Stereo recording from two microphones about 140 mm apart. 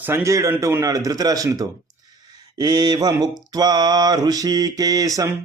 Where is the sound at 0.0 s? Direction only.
20° right (ahead or behind).